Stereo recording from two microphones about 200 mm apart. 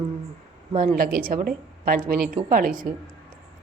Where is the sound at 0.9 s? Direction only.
45° right (ahead or behind).